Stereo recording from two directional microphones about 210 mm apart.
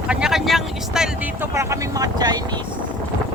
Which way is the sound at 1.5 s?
15° right (ahead or behind).